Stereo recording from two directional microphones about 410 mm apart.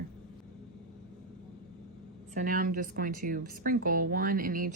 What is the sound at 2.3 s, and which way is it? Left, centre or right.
A woman's voice, right.